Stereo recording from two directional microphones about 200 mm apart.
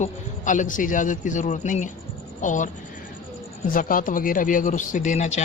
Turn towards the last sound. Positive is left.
turn(degrees=35)  # may be behind; listen again after turning